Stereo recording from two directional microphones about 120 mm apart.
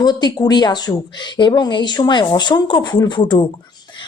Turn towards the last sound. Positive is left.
turn(degrees=40)  # may be behind; listen again after turning